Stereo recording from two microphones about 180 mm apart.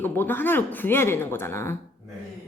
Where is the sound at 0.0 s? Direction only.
10° left (ahead or behind).